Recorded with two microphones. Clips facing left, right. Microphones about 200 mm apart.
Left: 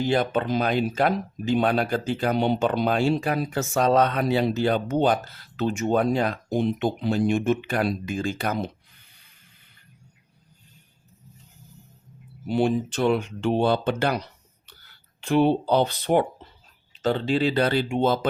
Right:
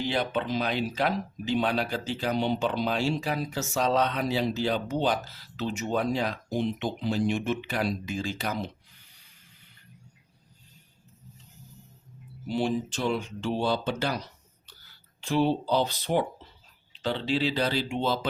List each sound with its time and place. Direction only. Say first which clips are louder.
0.0 s speech: left 5 dB; 45° left (ahead or behind)
12.5 s speech: left 5 dB; 60° left (ahead or behind)
16.9 s speech: left 5 dB; 45° left (ahead or behind)